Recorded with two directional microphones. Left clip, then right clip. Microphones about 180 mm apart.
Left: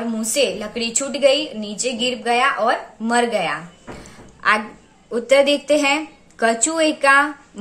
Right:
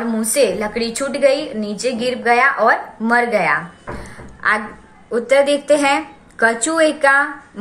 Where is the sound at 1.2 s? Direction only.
45° left (ahead or behind).